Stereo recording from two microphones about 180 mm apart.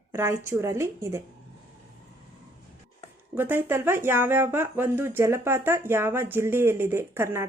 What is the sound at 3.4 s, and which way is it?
Speech, 10° right (ahead or behind).